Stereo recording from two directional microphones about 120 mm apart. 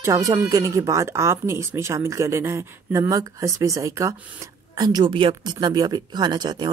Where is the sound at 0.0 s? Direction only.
30° right (ahead or behind).